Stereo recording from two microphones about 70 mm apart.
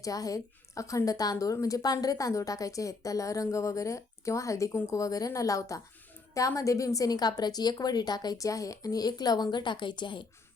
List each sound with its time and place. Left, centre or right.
0.0 s a woman's voice: left
8.4 s a woman's voice: left